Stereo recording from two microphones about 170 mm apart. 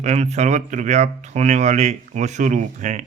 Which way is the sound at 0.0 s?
40° right (ahead or behind).